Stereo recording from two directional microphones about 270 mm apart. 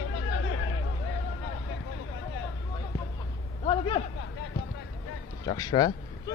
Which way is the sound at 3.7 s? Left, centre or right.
Centre.